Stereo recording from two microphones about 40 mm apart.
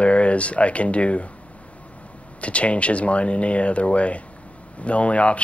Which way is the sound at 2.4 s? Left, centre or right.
Left.